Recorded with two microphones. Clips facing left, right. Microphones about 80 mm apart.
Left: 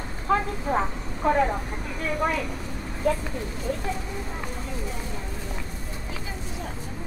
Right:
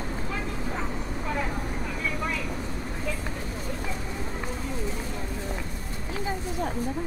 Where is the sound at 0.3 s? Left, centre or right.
Left.